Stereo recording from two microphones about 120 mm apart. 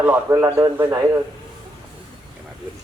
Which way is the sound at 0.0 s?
15° right (ahead or behind).